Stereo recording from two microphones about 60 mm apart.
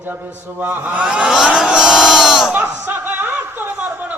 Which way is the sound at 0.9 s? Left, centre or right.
Centre.